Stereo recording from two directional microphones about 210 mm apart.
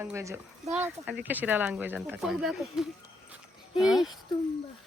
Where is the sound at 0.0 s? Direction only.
15° right (ahead or behind).